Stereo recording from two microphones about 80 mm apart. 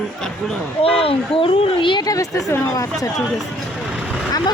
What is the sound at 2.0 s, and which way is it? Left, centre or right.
Speech, left.